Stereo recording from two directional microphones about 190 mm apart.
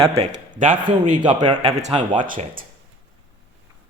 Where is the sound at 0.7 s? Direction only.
25° right (ahead or behind).